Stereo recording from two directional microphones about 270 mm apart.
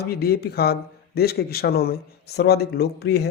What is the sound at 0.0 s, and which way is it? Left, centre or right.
A man's voice, left.